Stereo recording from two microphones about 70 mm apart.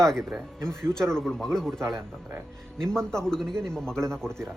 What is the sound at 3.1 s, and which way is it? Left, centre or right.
Speech, centre.